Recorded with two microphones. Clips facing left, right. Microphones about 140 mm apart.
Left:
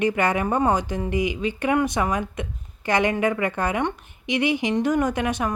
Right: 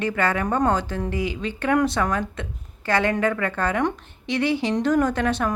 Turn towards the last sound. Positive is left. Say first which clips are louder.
# right 1 dB
turn(degrees=15)  # may be behind; listen again after turning